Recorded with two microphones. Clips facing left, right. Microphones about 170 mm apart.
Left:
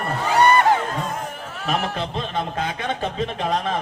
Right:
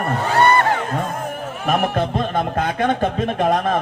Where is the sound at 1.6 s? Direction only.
55° right (ahead or behind).